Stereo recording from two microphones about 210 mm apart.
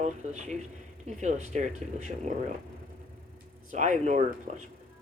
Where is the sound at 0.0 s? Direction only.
35° right (ahead or behind).